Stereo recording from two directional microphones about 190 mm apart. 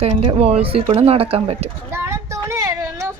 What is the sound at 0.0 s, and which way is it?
Speech, 30° right (ahead or behind).